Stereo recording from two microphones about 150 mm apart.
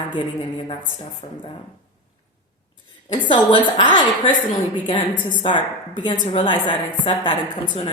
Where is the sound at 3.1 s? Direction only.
30° left (ahead or behind).